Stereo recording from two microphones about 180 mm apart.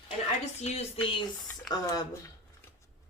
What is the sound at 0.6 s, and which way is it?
Speech, 35° left (ahead or behind).